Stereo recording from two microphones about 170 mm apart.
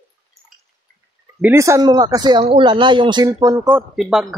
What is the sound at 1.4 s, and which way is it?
Speech, 15° right (ahead or behind).